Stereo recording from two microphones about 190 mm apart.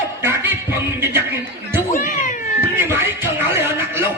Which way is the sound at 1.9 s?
40° left (ahead or behind).